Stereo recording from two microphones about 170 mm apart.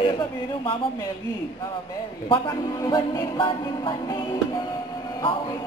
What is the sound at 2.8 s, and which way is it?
Music, 20° left (ahead or behind).